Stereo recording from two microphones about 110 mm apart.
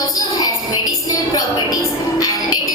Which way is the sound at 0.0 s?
35° left (ahead or behind).